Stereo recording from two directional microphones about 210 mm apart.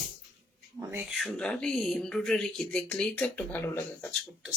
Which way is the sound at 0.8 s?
10° right (ahead or behind).